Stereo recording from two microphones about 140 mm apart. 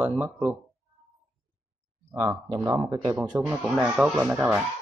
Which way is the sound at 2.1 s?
30° right (ahead or behind).